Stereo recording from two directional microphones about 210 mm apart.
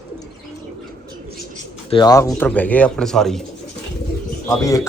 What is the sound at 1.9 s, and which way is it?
Speech, 20° left (ahead or behind).